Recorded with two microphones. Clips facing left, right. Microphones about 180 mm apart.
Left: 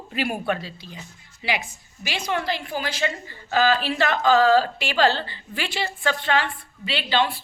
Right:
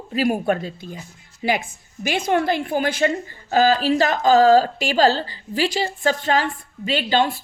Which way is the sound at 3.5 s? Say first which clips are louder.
Right 4 dB; 40° right (ahead or behind).